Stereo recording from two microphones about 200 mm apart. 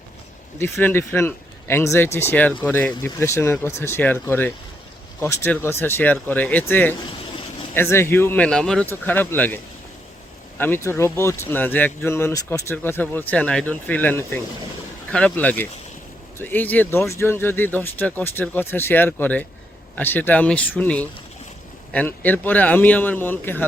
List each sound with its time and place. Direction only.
0.6 s speech: 10° left (ahead or behind)
10.6 s speech: 10° left (ahead or behind)